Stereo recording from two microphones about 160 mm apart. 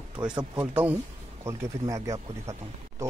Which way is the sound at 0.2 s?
30° right (ahead or behind).